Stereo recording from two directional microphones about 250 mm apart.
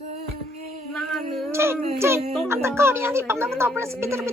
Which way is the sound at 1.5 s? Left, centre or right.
Centre.